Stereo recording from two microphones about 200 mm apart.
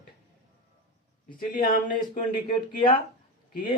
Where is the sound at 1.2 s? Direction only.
40° left (ahead or behind).